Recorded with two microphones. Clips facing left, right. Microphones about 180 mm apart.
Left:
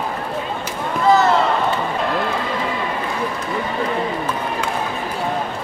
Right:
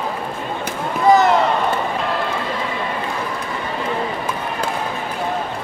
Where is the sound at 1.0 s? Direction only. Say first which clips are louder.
Right 2 dB; 15° right (ahead or behind).